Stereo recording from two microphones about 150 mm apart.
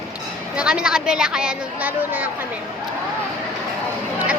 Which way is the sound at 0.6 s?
5° right (ahead or behind).